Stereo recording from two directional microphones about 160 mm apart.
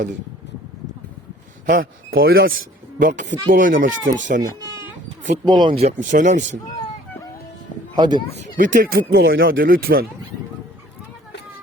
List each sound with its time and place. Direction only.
1.6 s a man's voice: 60° right (ahead or behind)
3.0 s speech: 50° right (ahead or behind)
5.5 s speech: 30° right (ahead or behind)
5.8 s speech: 50° right (ahead or behind)
7.9 s speech: 25° right (ahead or behind)
8.4 s speech: 55° right (ahead or behind)